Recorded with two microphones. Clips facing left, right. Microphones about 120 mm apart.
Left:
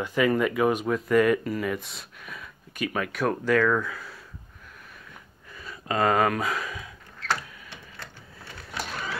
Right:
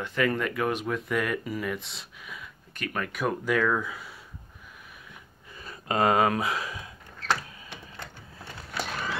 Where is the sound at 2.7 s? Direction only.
10° left (ahead or behind).